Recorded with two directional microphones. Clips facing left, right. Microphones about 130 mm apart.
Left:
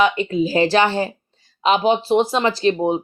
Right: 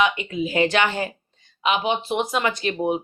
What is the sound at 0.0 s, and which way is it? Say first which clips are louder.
Speech: left 5 dB; 35° left (ahead or behind).